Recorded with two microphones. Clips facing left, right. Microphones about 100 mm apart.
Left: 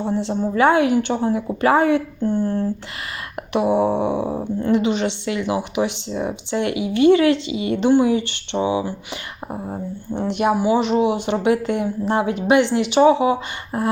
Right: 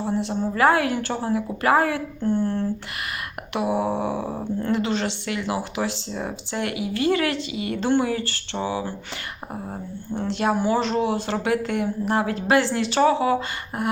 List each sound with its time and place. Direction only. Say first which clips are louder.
0.0 s speech: left 3 dB; 25° left (ahead or behind)
3.5 s speech: left 6 dB; 25° left (ahead or behind)